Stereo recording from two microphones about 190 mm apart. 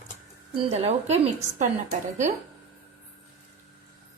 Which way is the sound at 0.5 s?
30° right (ahead or behind).